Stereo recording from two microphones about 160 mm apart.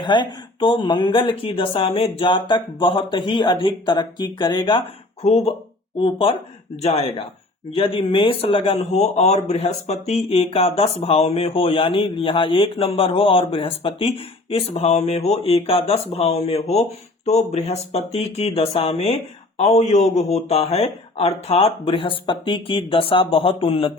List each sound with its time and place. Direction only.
0.0 s speech: 30° left (ahead or behind)
6.0 s speech: 35° left (ahead or behind)